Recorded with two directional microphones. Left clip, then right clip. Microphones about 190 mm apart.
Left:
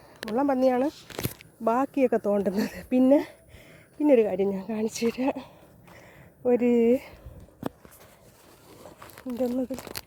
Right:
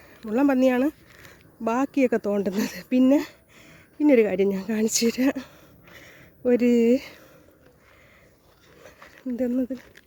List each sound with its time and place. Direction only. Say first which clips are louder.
0.3 s speech: right 2 dB; 35° right (ahead or behind)
1.6 s speech: right 1 dB; 15° right (ahead or behind)
4.3 s speech: right 3 dB; 35° right (ahead or behind)
5.9 s a sound: right 4 dB; 35° right (ahead or behind)
9.2 s speech: right 2 dB; 20° right (ahead or behind)